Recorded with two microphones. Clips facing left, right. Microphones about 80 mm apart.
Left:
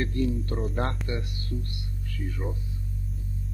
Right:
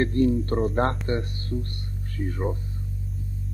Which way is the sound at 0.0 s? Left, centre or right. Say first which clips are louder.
Right 6 dB; right.